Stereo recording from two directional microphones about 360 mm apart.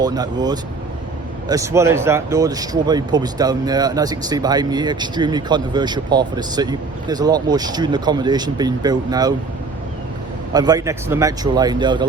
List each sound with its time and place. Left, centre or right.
0.0 s speech: centre
10.5 s speech: centre